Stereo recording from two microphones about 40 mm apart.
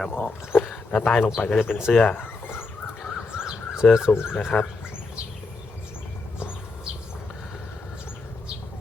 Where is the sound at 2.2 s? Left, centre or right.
Left.